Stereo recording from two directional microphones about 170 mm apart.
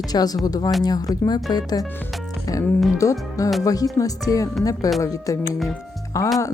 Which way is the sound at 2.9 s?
20° left (ahead or behind).